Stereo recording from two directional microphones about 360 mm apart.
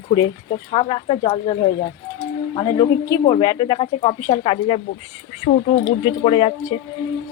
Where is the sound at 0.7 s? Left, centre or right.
Centre.